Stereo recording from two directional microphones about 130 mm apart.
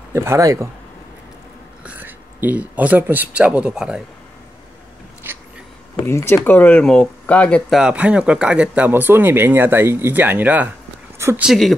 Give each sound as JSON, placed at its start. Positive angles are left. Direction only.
{"t": 0.1, "sound": "speech", "side_deg": -20}
{"t": 1.9, "sound": "speech", "side_deg": -15}
{"t": 5.2, "sound": "a sound", "side_deg": -15}
{"t": 5.9, "sound": "speech", "side_deg": 20}
{"t": 7.8, "sound": "speech", "side_deg": -10}
{"t": 11.4, "sound": "speech", "side_deg": 0}